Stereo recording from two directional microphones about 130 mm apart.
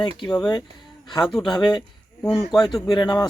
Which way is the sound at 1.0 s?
30° left (ahead or behind).